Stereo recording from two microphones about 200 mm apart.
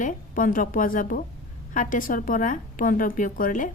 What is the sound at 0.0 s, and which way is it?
A woman's voice, 40° left (ahead or behind).